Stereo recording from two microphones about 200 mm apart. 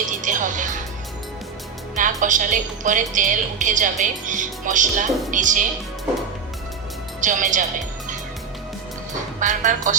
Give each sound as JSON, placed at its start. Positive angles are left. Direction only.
{"t": 0.2, "sound": "music", "side_deg": -40}
{"t": 2.0, "sound": "a woman's voice", "side_deg": -40}
{"t": 7.2, "sound": "a woman's voice", "side_deg": -40}
{"t": 9.4, "sound": "a woman's voice", "side_deg": -40}